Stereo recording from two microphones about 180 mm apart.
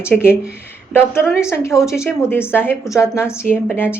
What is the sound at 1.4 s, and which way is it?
A woman's voice, 15° left (ahead or behind).